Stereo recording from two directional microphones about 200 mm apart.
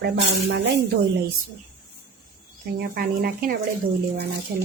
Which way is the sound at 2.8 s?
45° right (ahead or behind).